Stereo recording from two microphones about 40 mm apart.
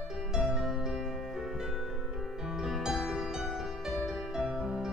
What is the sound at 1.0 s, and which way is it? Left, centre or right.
Music, centre.